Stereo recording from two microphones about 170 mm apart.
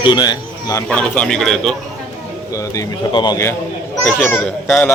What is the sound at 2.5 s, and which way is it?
Speech, 20° left (ahead or behind).